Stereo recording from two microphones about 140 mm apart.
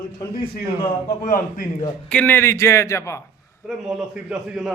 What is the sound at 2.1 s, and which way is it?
A man's voice, 10° left (ahead or behind).